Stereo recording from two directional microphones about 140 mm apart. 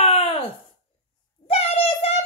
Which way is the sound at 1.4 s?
45° left (ahead or behind).